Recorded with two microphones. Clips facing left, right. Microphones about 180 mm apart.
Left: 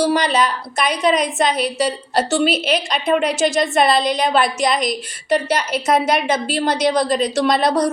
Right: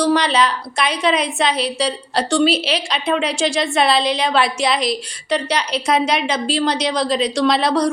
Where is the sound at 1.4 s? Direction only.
45° left (ahead or behind).